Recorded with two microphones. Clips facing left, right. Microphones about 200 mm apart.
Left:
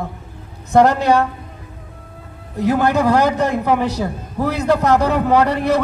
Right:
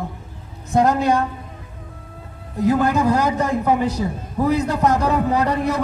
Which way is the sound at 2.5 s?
75° left (ahead or behind).